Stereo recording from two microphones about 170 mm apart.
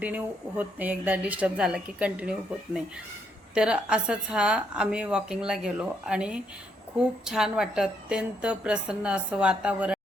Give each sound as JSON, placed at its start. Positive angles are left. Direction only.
{"t": 0.0, "sound": "a woman's voice", "side_deg": -10}
{"t": 3.5, "sound": "a woman's voice", "side_deg": -5}